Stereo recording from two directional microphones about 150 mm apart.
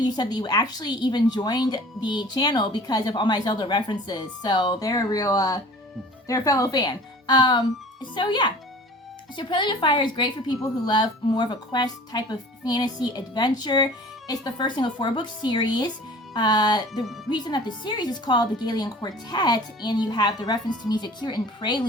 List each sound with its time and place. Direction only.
0.0 s a woman's voice: 30° left (ahead or behind)
16.9 s speech: centre (ahead or behind)
17.2 s a woman's voice: 30° left (ahead or behind)